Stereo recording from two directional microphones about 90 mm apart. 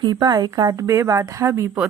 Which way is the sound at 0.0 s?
50° right (ahead or behind).